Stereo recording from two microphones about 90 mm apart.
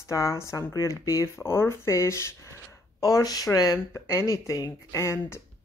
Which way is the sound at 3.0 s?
45° left (ahead or behind).